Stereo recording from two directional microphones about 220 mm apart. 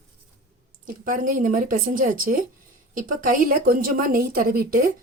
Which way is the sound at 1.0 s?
40° right (ahead or behind).